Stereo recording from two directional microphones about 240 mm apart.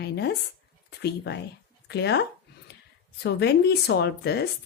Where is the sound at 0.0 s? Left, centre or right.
Left.